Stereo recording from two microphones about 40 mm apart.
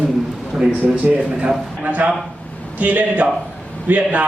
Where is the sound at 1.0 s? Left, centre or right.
Right.